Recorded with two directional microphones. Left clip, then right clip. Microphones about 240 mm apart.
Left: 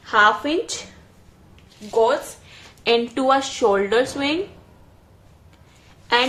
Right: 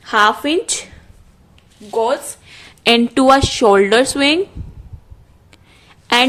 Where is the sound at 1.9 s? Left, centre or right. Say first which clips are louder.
Right 1 dB; right.